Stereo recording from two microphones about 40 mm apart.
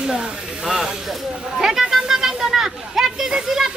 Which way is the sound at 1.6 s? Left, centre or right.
Centre.